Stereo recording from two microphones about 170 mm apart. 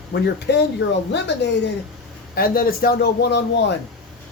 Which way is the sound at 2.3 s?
60° left (ahead or behind).